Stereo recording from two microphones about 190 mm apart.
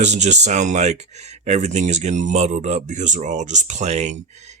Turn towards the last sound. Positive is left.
turn(degrees=-35)  # may be behind; listen again after turning